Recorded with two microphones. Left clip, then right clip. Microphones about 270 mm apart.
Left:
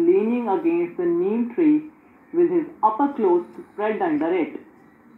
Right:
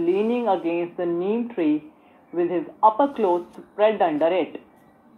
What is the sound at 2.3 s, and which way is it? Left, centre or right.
A woman's voice, right.